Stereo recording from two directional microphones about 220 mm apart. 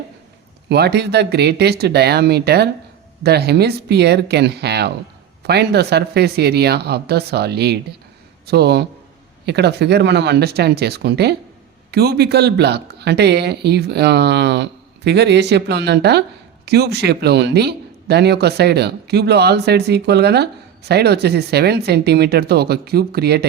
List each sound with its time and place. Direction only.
0.7 s speech: 50° right (ahead or behind)